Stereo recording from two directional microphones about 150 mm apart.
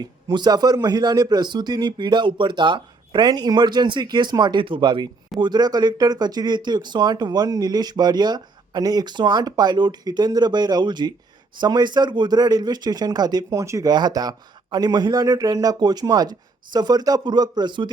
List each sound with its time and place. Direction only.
0.3 s speech: 25° right (ahead or behind)